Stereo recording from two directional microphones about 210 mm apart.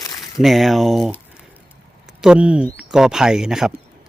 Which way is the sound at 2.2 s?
5° right (ahead or behind).